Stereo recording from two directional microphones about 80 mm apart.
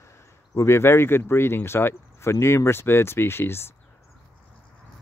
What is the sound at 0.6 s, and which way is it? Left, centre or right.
Speech, left.